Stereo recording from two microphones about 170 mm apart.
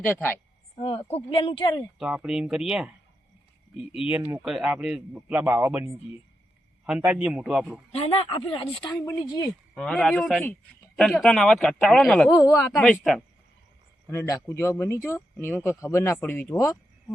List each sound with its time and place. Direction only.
0.0 s speech: 10° left (ahead or behind)
0.8 s speech: 35° left (ahead or behind)
2.0 s speech: 5° right (ahead or behind)
4.1 s a man's voice: 10° right (ahead or behind)
7.9 s speech: 35° left (ahead or behind)
9.0 s speech: 15° left (ahead or behind)
9.7 s speech: 5° left (ahead or behind)
12.3 s speech: 20° left (ahead or behind)
12.7 s speech: 5° left (ahead or behind)
14.1 s speech: 20° left (ahead or behind)